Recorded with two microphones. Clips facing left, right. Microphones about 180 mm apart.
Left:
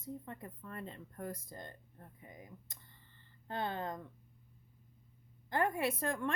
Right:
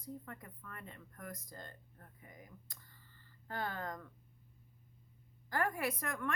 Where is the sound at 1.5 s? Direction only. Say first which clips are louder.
Left 3 dB; 20° left (ahead or behind).